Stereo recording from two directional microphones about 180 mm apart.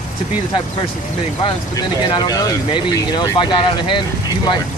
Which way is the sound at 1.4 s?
25° left (ahead or behind).